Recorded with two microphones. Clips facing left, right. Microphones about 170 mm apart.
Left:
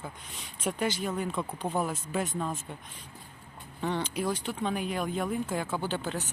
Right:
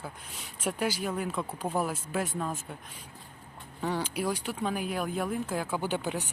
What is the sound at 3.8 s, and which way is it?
Speech, 10° right (ahead or behind).